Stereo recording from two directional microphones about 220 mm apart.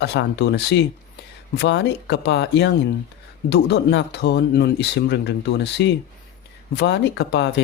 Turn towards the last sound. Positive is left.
turn(degrees=50)  # may be behind; listen again after turning